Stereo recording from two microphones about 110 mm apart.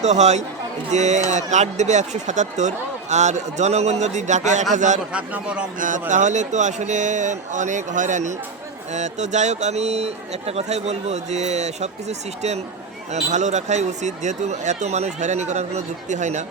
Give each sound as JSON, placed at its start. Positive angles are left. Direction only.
{"t": 0.0, "sound": "speech", "side_deg": -90}
{"t": 5.1, "sound": "a man's voice", "side_deg": -10}
{"t": 6.1, "sound": "speech", "side_deg": -90}